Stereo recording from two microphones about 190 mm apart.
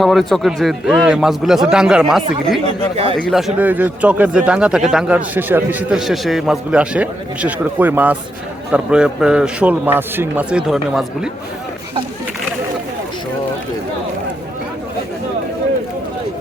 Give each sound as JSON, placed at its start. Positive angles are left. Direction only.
{"t": 0.0, "sound": "a man's voice", "side_deg": 0}
{"t": 2.9, "sound": "speech", "side_deg": -30}
{"t": 3.2, "sound": "a man's voice", "side_deg": 0}